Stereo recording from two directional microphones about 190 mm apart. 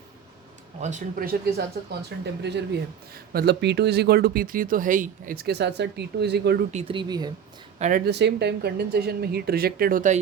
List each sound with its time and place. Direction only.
0.8 s speech: 40° right (ahead or behind); by 6.7 s 60° right (ahead or behind)
6.7 s speech: 25° right (ahead or behind)
7.8 s speech: 40° right (ahead or behind)
8.0 s speech: 60° right (ahead or behind); by 10.2 s 45° right (ahead or behind)